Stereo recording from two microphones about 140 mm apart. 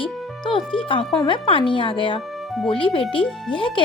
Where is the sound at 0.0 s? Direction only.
35° left (ahead or behind).